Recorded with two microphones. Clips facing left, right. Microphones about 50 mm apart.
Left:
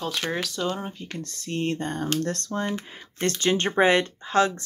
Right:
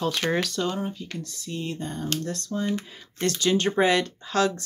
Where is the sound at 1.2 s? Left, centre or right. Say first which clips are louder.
Left 7 dB; left.